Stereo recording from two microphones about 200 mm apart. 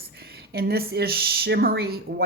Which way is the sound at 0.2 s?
50° right (ahead or behind).